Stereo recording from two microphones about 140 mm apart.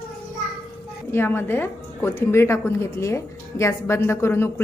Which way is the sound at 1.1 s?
15° left (ahead or behind).